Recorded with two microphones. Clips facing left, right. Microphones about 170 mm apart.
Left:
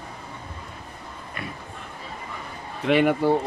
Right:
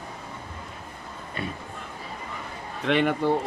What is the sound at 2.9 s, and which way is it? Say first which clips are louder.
Speech: left 3 dB; 10° left (ahead or behind).